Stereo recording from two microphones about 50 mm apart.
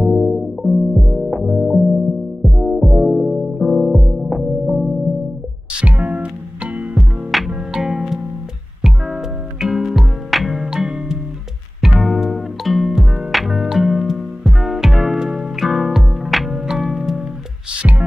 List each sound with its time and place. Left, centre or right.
0.0 s music: centre
5.9 s music: right
7.2 s music: centre